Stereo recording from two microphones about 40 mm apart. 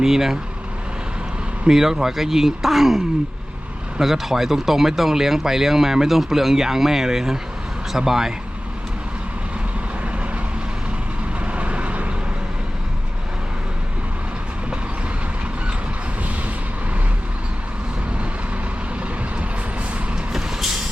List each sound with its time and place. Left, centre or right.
0.0 s speech: centre
1.6 s speech: centre
4.0 s speech: centre
11.4 s vehicle: right